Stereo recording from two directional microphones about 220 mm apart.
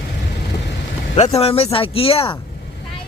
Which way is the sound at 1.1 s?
25° left (ahead or behind).